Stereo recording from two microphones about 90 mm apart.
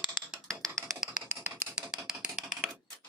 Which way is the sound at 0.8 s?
5° right (ahead or behind).